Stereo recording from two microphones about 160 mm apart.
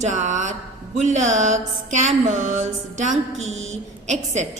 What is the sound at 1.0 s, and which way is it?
A woman's voice, 50° right (ahead or behind).